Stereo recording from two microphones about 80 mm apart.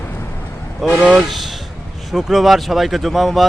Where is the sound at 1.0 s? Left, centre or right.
Centre.